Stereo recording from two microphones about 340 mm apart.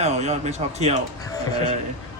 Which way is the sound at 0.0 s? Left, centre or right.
Centre.